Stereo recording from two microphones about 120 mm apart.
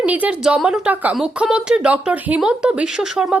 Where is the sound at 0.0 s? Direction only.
10° right (ahead or behind).